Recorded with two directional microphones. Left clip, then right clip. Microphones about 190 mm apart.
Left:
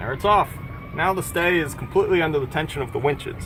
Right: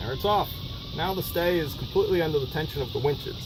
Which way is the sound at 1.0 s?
10° left (ahead or behind).